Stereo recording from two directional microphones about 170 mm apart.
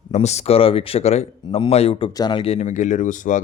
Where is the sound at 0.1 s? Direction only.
40° left (ahead or behind).